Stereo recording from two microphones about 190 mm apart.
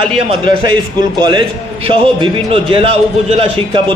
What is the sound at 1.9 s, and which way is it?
A man's voice, 30° right (ahead or behind).